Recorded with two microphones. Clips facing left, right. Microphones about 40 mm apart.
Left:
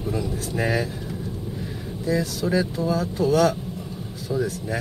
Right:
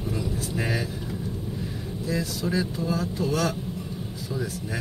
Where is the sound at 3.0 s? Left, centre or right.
Left.